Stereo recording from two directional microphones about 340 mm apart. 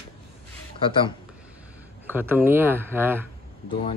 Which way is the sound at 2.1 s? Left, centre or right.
Centre.